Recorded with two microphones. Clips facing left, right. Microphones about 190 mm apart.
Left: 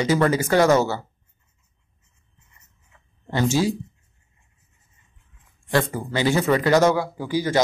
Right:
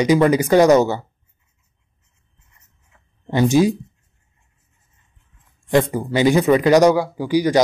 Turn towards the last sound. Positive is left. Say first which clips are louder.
# right 6 dB
turn(degrees=-15)  # may be behind; listen again after turning